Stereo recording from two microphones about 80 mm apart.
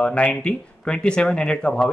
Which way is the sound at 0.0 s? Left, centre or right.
Centre.